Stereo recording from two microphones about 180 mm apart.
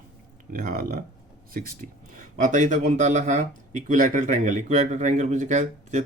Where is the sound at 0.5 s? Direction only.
55° right (ahead or behind).